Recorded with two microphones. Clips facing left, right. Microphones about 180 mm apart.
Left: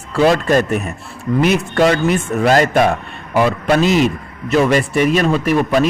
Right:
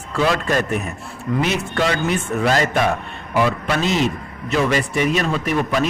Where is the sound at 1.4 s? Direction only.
50° left (ahead or behind).